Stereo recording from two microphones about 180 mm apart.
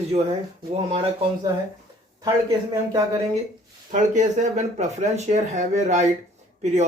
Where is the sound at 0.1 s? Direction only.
35° right (ahead or behind).